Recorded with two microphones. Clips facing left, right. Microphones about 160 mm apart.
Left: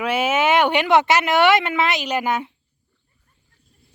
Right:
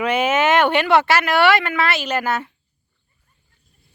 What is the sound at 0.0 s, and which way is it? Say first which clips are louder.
Speech: right 2 dB; 5° left (ahead or behind).